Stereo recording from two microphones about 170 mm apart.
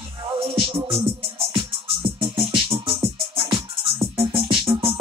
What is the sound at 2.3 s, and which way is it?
Music, 30° right (ahead or behind).